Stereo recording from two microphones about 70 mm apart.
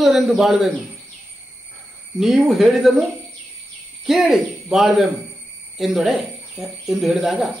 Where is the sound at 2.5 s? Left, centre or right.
Centre.